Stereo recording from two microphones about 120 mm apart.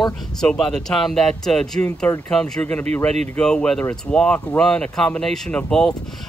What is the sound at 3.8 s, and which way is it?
Speech, 20° left (ahead or behind).